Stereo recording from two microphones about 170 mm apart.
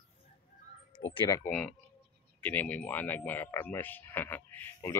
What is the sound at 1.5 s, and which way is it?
Speech, 5° left (ahead or behind).